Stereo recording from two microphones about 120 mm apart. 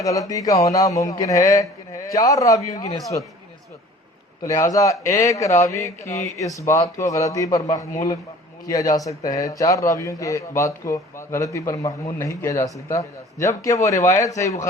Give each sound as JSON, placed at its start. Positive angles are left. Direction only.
{"t": 0.0, "sound": "a man's voice", "side_deg": 30}
{"t": 4.4, "sound": "a man's voice", "side_deg": 30}